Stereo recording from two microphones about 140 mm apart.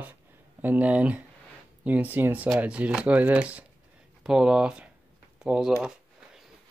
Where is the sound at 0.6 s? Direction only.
10° right (ahead or behind).